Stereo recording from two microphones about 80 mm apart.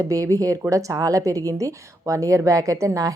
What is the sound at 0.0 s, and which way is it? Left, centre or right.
A woman's voice, right.